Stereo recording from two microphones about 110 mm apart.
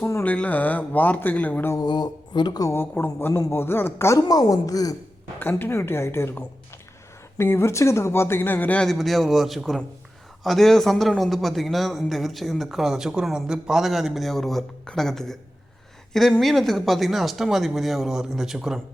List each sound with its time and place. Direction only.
0.0 s speech: 15° left (ahead or behind)
1.7 s a sound: 40° left (ahead or behind)
2.7 s speech: 20° left (ahead or behind)
5.4 s speech: 20° left (ahead or behind)
8.9 s a man's voice: centre (ahead or behind)
16.4 s a man's voice: centre (ahead or behind)